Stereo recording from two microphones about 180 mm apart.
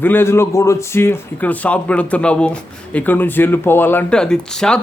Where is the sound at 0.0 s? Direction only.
10° left (ahead or behind).